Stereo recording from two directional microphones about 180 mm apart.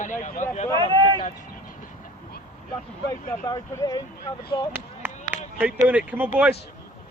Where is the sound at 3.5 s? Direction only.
20° left (ahead or behind).